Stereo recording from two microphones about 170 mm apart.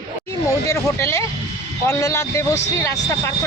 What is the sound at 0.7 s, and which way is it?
Speech, 15° left (ahead or behind).